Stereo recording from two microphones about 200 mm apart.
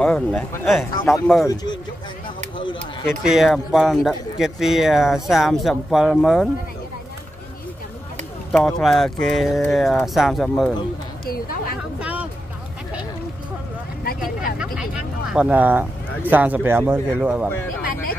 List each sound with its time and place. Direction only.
0.0 s speech: 5° left (ahead or behind)
1.5 s speech: 20° left (ahead or behind)
3.1 s speech: centre (ahead or behind)
8.5 s speech: 5° left (ahead or behind)
11.2 s speech: 45° left (ahead or behind)
12.0 s music: 5° right (ahead or behind)
14.0 s vehicle: 45° left (ahead or behind)
14.6 s speech: 5° right (ahead or behind)